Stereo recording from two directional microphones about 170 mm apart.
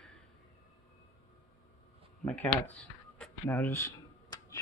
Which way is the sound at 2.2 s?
10° left (ahead or behind).